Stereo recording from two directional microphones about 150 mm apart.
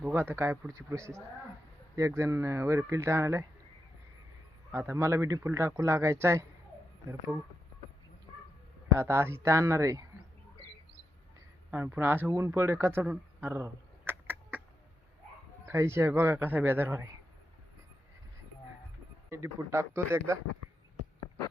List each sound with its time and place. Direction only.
0.1 s a man's voice: 15° right (ahead or behind)
4.7 s a man's voice: 15° right (ahead or behind)
9.0 s a man's voice: 15° right (ahead or behind)
11.7 s a man's voice: 10° right (ahead or behind)
15.6 s a man's voice: 20° right (ahead or behind)
19.3 s a man's voice: 20° right (ahead or behind)